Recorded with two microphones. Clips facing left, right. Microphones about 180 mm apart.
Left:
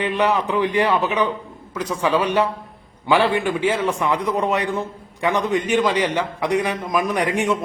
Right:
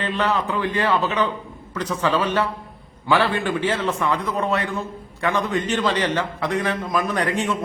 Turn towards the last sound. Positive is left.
turn(degrees=15)  # may be behind; listen again after turning